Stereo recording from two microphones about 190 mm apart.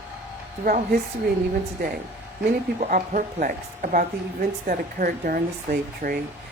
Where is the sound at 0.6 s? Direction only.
50° right (ahead or behind).